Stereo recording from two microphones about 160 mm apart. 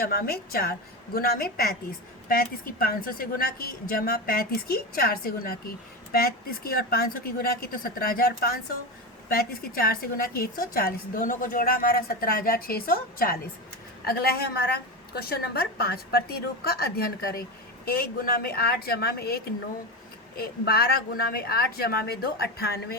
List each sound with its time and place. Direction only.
0.0 s a woman's voice: 70° left (ahead or behind)